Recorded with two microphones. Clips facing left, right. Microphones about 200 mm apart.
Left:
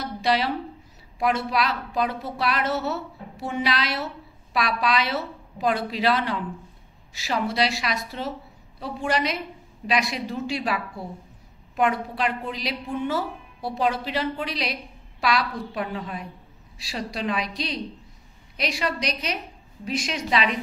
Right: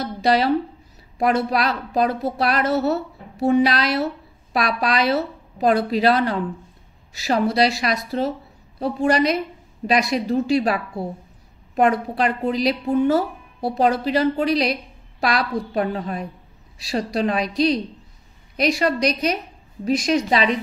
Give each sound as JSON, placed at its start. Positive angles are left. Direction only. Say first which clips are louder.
{"t": 0.2, "sound": "a woman's voice", "louder": "right 6 dB", "side_deg": -40}